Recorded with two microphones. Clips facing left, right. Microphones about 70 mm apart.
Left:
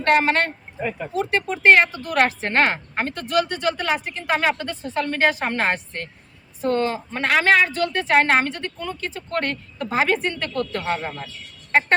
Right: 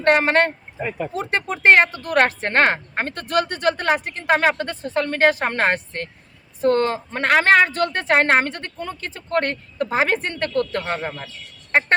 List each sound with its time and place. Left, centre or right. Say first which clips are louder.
0.0 s a woman's voice: right 2 dB; right
10.9 s a man's voice: even; right